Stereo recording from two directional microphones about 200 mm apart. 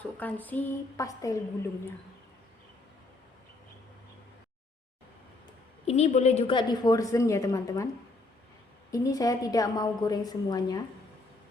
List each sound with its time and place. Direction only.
0.2 s a woman's voice: 10° left (ahead or behind)
5.8 s a woman's voice: 30° left (ahead or behind); by 7.9 s 15° left (ahead or behind)
8.9 s a woman's voice: 20° left (ahead or behind)